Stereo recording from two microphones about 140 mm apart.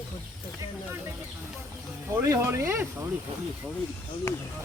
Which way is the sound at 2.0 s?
20° right (ahead or behind).